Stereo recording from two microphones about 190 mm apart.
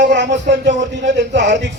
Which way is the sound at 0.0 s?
70° right (ahead or behind).